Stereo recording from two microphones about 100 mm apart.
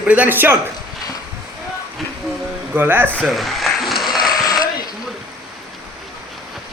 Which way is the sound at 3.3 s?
Centre (ahead or behind).